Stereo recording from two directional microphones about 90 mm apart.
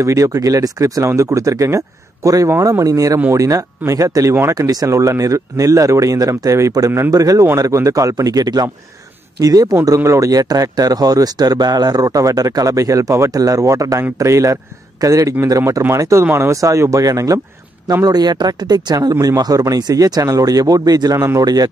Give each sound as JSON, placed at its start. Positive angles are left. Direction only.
{"t": 0.0, "sound": "speech", "side_deg": -35}
{"t": 9.8, "sound": "speech", "side_deg": -30}